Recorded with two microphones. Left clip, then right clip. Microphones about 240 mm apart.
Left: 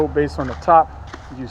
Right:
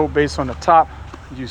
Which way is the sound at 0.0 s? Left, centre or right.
Right.